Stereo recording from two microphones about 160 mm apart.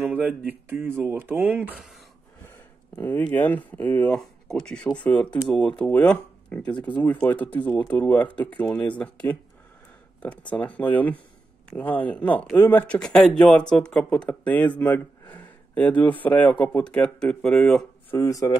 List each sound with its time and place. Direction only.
0.0 s speech: 10° right (ahead or behind)
3.0 s speech: 10° left (ahead or behind)
10.5 s speech: 10° left (ahead or behind)
18.1 s speech: 20° left (ahead or behind)